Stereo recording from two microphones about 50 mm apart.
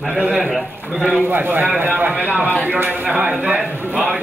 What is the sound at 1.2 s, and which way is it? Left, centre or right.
A man's voice, right.